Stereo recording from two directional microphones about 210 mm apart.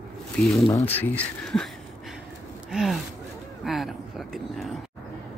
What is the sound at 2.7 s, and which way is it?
Speech, centre (ahead or behind).